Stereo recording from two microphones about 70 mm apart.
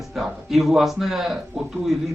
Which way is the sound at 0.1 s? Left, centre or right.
Centre.